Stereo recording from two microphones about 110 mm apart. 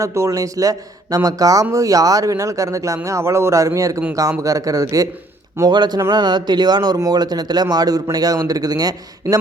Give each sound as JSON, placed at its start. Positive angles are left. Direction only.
{"t": 0.0, "sound": "speech", "side_deg": -30}